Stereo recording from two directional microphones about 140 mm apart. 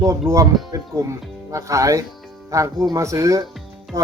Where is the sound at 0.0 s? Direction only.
25° right (ahead or behind).